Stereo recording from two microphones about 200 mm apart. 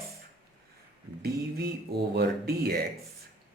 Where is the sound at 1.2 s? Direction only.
50° right (ahead or behind).